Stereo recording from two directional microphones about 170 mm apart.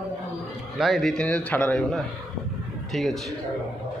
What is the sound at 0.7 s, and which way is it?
A man's voice, centre (ahead or behind).